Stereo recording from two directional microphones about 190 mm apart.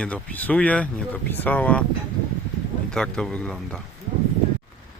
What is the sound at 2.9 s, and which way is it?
Speech, 5° left (ahead or behind).